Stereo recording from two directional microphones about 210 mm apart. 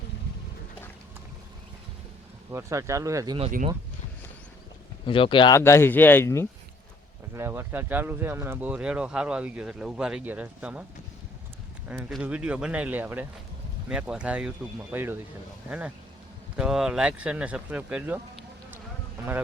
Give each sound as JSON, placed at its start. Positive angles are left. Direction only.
{"t": 2.5, "sound": "speech", "side_deg": -15}
{"t": 5.0, "sound": "speech", "side_deg": 25}
{"t": 5.5, "sound": "speech", "side_deg": 10}
{"t": 7.3, "sound": "speech", "side_deg": -10}
{"t": 11.9, "sound": "speech", "side_deg": -5}
{"t": 16.6, "sound": "speech", "side_deg": -5}